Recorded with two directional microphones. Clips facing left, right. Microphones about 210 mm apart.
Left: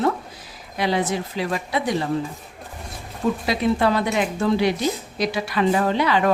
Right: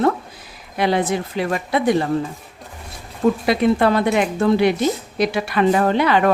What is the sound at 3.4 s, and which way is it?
Speech, 55° right (ahead or behind).